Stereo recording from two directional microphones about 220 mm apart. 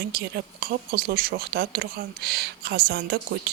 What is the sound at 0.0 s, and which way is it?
Speech, 45° right (ahead or behind).